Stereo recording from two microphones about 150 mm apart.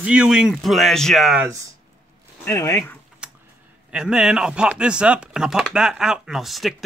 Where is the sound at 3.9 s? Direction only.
5° right (ahead or behind).